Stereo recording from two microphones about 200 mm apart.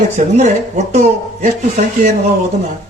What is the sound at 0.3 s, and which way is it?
A man's voice, 35° right (ahead or behind).